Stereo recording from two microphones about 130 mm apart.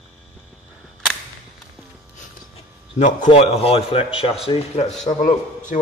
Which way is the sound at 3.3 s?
50° left (ahead or behind).